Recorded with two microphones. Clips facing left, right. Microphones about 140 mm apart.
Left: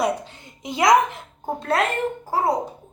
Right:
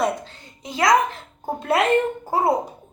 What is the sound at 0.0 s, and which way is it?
A woman's voice, 15° left (ahead or behind).